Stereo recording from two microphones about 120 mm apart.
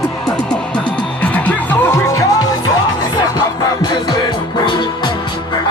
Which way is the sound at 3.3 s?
35° left (ahead or behind).